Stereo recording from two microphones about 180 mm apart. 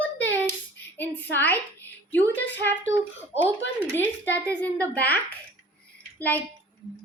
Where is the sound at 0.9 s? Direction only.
10° left (ahead or behind).